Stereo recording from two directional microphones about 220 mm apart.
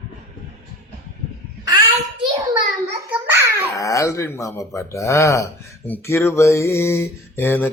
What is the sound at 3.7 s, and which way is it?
Mantra, 15° left (ahead or behind).